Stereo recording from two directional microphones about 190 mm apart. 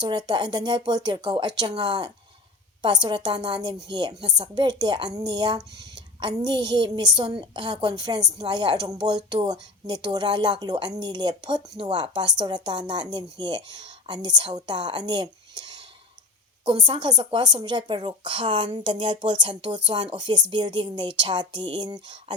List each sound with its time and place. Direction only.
0.0 s speech: 20° right (ahead or behind)